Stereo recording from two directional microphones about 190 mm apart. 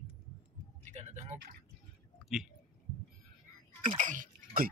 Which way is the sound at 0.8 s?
40° right (ahead or behind).